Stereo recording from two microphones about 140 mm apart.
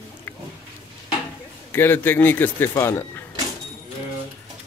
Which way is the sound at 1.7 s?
15° left (ahead or behind).